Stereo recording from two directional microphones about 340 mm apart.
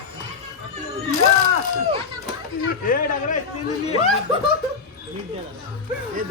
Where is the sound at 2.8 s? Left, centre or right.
Left.